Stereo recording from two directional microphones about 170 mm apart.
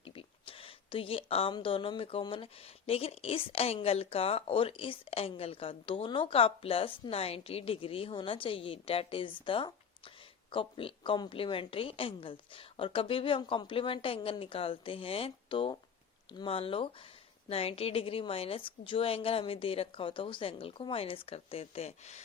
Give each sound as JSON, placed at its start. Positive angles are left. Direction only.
{"t": 0.0, "sound": "speech", "side_deg": 35}